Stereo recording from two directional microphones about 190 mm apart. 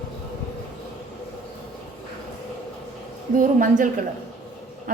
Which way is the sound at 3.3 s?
45° right (ahead or behind).